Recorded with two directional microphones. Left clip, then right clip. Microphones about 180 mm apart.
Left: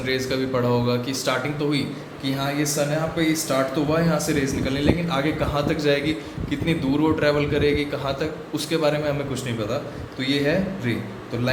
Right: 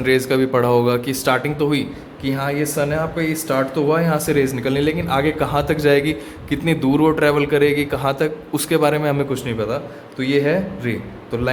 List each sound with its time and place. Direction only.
0.0 s a man's voice: 70° right (ahead or behind)
2.2 s a man's voice: 60° right (ahead or behind)